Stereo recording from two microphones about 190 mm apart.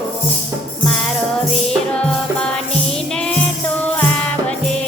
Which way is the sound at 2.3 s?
5° left (ahead or behind).